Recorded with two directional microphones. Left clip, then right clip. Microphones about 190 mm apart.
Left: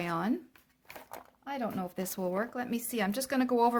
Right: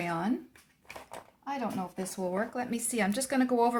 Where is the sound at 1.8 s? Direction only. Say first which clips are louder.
Even; 40° left (ahead or behind).